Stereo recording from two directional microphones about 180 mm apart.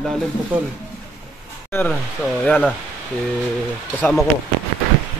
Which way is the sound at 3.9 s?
5° left (ahead or behind).